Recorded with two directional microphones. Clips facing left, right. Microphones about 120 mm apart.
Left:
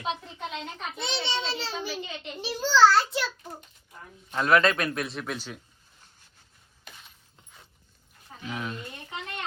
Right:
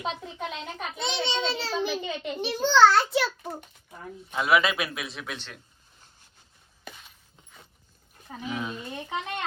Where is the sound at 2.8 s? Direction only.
Centre (ahead or behind).